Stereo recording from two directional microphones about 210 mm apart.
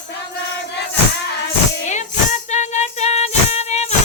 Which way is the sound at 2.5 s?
35° left (ahead or behind).